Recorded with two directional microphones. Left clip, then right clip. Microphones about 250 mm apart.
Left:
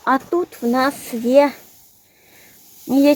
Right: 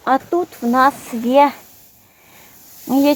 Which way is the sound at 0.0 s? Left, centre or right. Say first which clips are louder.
Right 1 dB; centre.